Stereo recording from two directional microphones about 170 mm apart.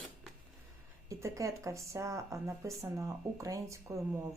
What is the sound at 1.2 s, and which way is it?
Speech, 20° right (ahead or behind).